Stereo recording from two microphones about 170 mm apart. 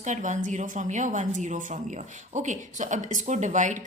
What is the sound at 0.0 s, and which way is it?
A woman's voice, 45° right (ahead or behind).